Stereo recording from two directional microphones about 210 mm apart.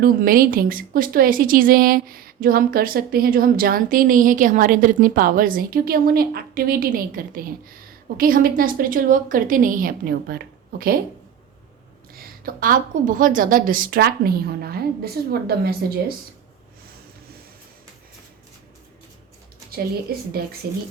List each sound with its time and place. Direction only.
0.0 s a woman's voice: 45° right (ahead or behind)
12.1 s a woman's voice: 45° right (ahead or behind)
19.7 s a woman's voice: 45° right (ahead or behind)